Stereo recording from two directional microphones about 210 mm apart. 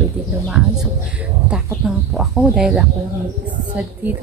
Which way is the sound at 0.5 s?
5° right (ahead or behind).